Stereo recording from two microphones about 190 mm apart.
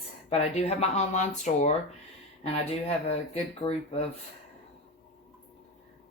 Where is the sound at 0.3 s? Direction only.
35° left (ahead or behind).